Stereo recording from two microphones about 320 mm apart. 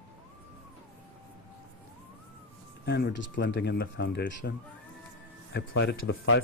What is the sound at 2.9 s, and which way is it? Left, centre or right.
Speech, left.